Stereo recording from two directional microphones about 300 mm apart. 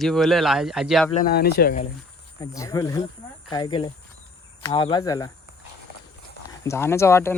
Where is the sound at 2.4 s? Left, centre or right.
Centre.